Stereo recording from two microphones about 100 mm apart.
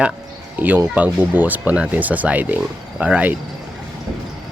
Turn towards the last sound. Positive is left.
turn(degrees=-15)  # may be behind; listen again after turning